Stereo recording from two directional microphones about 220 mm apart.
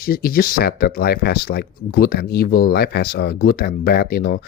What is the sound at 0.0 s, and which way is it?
Speech, 40° left (ahead or behind).